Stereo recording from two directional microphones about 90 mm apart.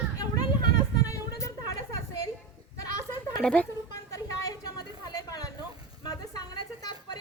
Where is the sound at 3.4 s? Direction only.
10° left (ahead or behind).